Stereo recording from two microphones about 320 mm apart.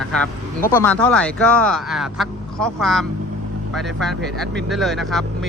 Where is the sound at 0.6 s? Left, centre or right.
Centre.